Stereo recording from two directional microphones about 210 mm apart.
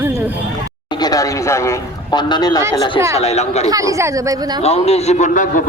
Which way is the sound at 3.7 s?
15° right (ahead or behind).